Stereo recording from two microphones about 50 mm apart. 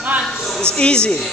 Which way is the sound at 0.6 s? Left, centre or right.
Centre.